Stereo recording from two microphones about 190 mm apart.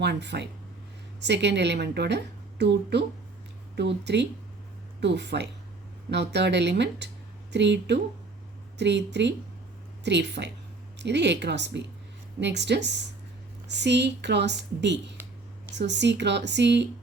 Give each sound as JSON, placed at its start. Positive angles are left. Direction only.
{"t": 0.0, "sound": "a woman's voice", "side_deg": -65}